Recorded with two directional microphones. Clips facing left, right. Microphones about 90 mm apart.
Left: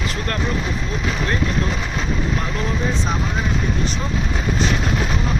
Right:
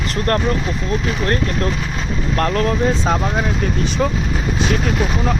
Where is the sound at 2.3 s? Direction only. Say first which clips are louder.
Right 6 dB; 65° right (ahead or behind).